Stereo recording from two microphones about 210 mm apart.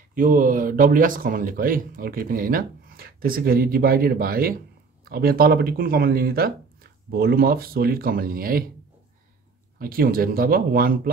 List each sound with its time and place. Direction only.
0.1 s speech: 40° right (ahead or behind)
9.8 s speech: 45° right (ahead or behind)